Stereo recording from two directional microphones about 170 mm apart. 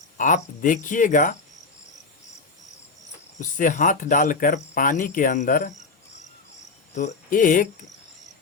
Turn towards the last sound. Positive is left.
turn(degrees=50)  # may be behind; listen again after turning